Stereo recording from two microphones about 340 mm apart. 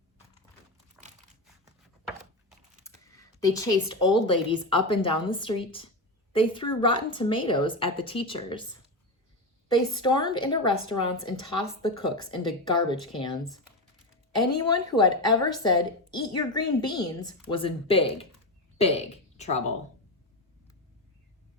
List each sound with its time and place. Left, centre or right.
1.6 s a sound: centre
6.3 s a woman's voice: centre
9.6 s a woman's voice: centre
14.6 s a woman's voice: centre